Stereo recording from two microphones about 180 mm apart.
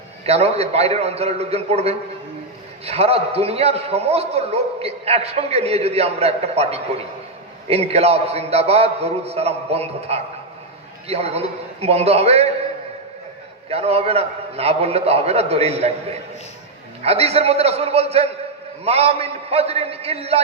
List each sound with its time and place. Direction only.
0.3 s a man's voice: 35° right (ahead or behind)
13.7 s a man's voice: 35° right (ahead or behind)